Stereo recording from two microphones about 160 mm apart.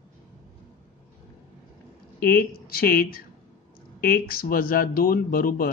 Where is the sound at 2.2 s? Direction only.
65° left (ahead or behind).